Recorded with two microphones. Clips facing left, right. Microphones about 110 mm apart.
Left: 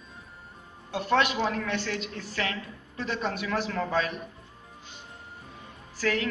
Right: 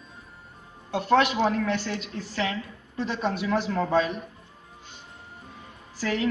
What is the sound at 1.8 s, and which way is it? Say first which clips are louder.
Speech: right 1 dB; 20° right (ahead or behind).